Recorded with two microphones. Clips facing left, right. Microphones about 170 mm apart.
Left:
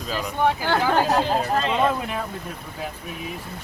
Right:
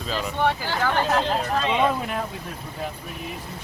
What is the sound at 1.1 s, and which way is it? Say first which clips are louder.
Speech: left 2 dB; 10° left (ahead or behind).